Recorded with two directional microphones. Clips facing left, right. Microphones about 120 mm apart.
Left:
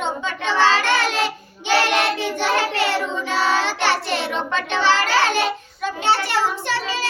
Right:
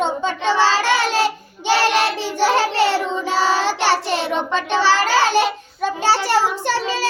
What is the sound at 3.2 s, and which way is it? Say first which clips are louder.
Child singing: right 2 dB; 35° right (ahead or behind).